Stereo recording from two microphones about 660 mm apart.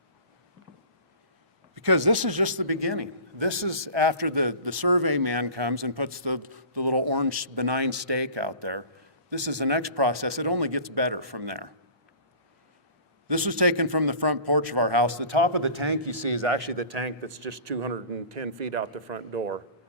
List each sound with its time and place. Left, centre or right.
1.7 s a man's voice: right
13.2 s a man's voice: right